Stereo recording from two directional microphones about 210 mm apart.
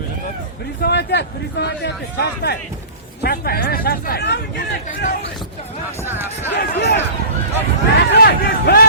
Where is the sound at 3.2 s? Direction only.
45° left (ahead or behind).